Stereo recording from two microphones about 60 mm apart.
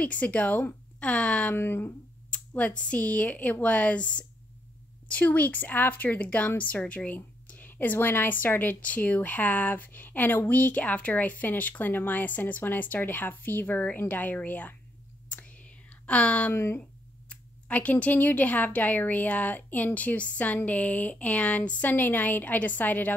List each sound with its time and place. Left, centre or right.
0.0 s speech: left
1.5 s speech: left
2.3 s speech: left
15.2 s whispering: left
16.5 s speech: left
17.3 s speech: left